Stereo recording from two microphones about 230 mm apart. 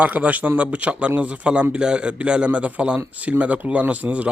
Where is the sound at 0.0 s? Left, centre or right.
Centre.